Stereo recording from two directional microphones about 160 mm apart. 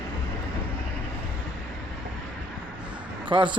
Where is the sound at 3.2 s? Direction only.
30° right (ahead or behind).